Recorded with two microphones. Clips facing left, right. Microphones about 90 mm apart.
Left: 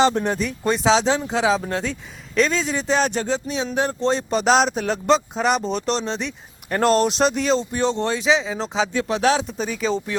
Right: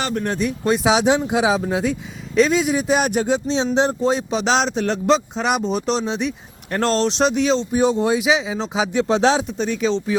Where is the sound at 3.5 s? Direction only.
25° right (ahead or behind).